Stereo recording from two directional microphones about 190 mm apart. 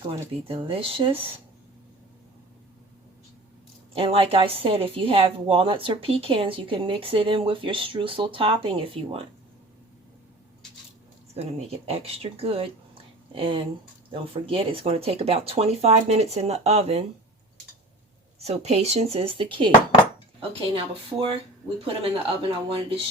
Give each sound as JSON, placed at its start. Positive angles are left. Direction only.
{"t": 0.4, "sound": "a woman's voice", "side_deg": -30}
{"t": 3.9, "sound": "a woman's voice", "side_deg": -30}
{"t": 11.9, "sound": "a woman's voice", "side_deg": -30}
{"t": 18.4, "sound": "speech", "side_deg": -35}
{"t": 20.7, "sound": "a woman's voice", "side_deg": -25}